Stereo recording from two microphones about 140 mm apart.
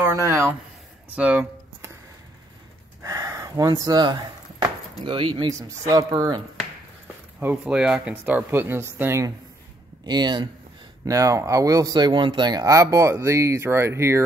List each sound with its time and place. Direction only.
0.0 s speech: 20° right (ahead or behind)
1.1 s speech: 10° right (ahead or behind)
3.0 s a sound: 25° right (ahead or behind)
5.0 s speech: 35° right (ahead or behind)
7.3 s speech: 5° right (ahead or behind)
10.0 s speech: 30° right (ahead or behind)